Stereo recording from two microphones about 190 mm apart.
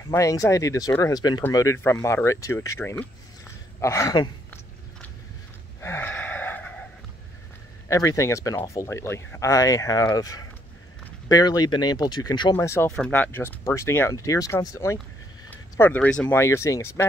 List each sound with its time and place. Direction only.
0.1 s speech: 15° left (ahead or behind)
5.8 s wheeze: 10° left (ahead or behind)
7.9 s speech: 15° left (ahead or behind)